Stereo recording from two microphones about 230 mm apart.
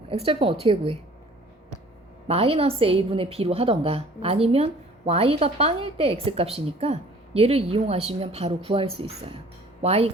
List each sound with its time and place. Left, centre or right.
0.1 s a woman's voice: right
2.2 s a woman's voice: right